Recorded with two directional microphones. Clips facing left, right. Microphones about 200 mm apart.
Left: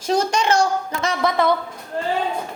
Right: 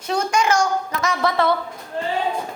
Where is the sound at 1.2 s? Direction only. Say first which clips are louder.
Left 1 dB; 15° left (ahead or behind).